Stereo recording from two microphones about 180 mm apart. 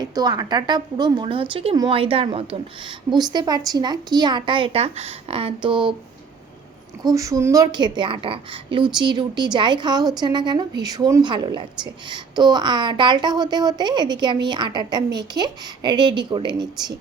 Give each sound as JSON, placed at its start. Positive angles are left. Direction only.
{"t": 0.0, "sound": "speech", "side_deg": -20}
{"t": 7.1, "sound": "speech", "side_deg": -20}